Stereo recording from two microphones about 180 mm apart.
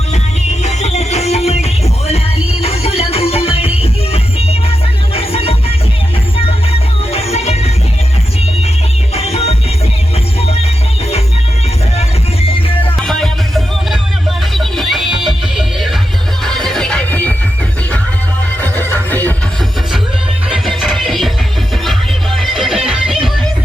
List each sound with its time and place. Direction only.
0.6 s music: 40° left (ahead or behind)
7.1 s music: 35° left (ahead or behind)
9.1 s music: 35° left (ahead or behind)
11.9 s music: 30° left (ahead or behind)
13.0 s music: centre (ahead or behind)
18.8 s neigh: 10° left (ahead or behind)
20.7 s music: centre (ahead or behind)
22.4 s music: centre (ahead or behind)